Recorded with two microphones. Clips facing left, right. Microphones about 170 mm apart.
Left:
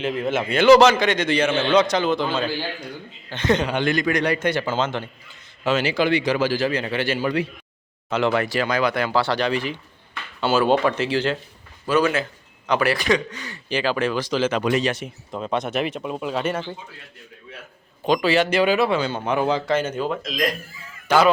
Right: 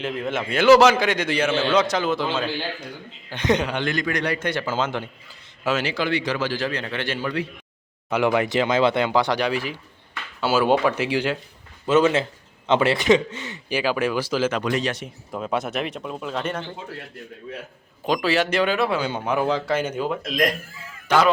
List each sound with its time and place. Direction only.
0.0 s speech: centre (ahead or behind)
3.7 s a man's voice: 10° left (ahead or behind)
4.6 s speech: 10° right (ahead or behind)
5.9 s a man's voice: 15° left (ahead or behind)
8.1 s speech: 15° right (ahead or behind)
11.9 s a man's voice: 20° right (ahead or behind)
13.7 s speech: 10° right (ahead or behind)
14.6 s speech: 5° left (ahead or behind)
18.0 s speech: centre (ahead or behind)
18.9 s speech: 10° right (ahead or behind)
19.7 s speech: 10° right (ahead or behind)